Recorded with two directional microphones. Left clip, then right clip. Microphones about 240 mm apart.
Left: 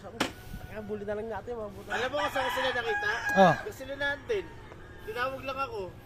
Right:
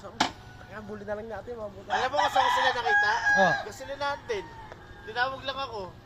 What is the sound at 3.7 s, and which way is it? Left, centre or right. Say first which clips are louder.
Chicken: right 1 dB; centre.